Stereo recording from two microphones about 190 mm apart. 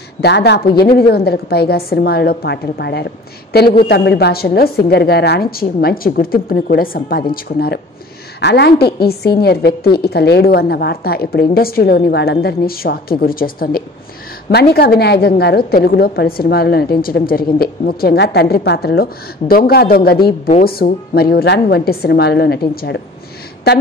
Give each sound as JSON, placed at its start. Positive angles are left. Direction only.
{"t": 0.2, "sound": "a woman's voice", "side_deg": 60}